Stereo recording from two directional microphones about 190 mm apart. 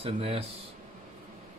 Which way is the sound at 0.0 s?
30° right (ahead or behind).